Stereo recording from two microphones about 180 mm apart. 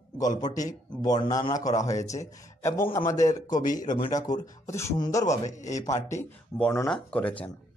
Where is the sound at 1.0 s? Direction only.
20° left (ahead or behind).